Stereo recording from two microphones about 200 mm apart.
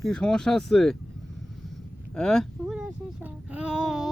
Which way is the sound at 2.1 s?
5° left (ahead or behind).